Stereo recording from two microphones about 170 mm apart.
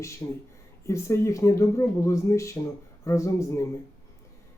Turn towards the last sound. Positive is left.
turn(degrees=15)  # may be behind; listen again after turning